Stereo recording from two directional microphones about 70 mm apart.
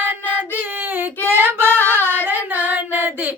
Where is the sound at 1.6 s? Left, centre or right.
Left.